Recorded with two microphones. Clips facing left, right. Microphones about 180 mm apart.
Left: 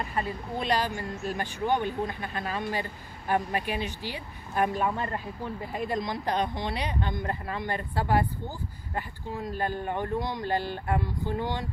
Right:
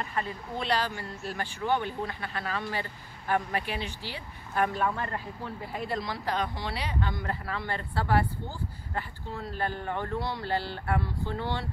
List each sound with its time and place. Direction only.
0.1 s speech: 15° left (ahead or behind)